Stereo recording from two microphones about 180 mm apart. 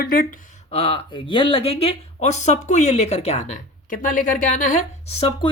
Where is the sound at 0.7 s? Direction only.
30° left (ahead or behind).